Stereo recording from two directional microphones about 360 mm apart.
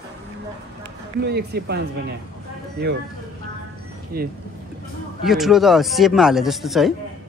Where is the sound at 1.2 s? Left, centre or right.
Right.